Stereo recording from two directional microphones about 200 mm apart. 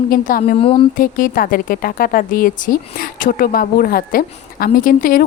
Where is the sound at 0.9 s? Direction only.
45° left (ahead or behind).